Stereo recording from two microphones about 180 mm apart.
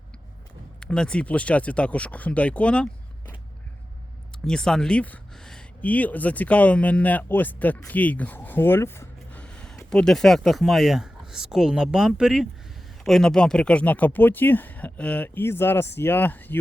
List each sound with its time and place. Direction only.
0.8 s speech: 5° left (ahead or behind)
4.4 s speech: 5° left (ahead or behind)